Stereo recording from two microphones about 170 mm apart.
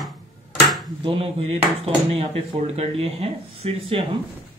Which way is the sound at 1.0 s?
35° right (ahead or behind).